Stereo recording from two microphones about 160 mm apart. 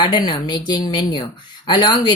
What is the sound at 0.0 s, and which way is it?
Speech, 30° left (ahead or behind).